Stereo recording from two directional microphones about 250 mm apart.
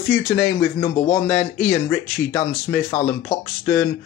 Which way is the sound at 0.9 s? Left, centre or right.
Left.